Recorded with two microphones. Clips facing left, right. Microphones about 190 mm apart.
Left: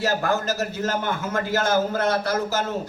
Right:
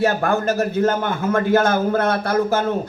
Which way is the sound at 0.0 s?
55° right (ahead or behind).